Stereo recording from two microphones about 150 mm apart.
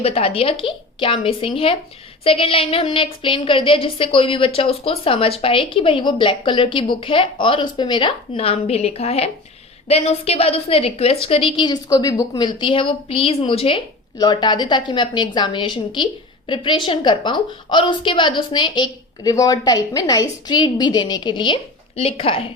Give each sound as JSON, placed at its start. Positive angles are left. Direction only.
{"t": 0.0, "sound": "a woman's voice", "side_deg": 40}